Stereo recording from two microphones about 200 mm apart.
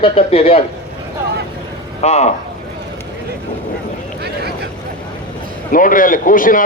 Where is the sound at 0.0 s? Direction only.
30° left (ahead or behind).